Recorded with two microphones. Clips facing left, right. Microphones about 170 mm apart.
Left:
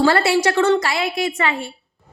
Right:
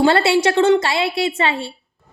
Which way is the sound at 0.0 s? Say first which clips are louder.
Right 1 dB; 25° right (ahead or behind).